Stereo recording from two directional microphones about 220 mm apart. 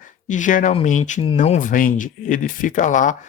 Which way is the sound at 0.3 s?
35° left (ahead or behind).